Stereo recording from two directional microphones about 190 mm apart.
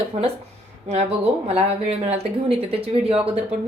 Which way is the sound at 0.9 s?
35° right (ahead or behind).